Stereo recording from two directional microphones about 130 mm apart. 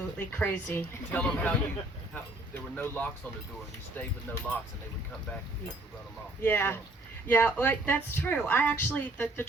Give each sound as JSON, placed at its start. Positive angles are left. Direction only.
{"t": 0.2, "sound": "speech", "side_deg": 15}
{"t": 2.7, "sound": "speech", "side_deg": 15}
{"t": 6.4, "sound": "speech", "side_deg": 15}